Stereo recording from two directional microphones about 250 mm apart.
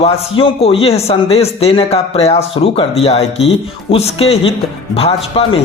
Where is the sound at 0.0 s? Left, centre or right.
Left.